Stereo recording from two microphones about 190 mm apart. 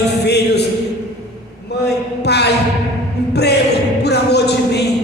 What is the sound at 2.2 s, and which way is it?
Music, 60° left (ahead or behind).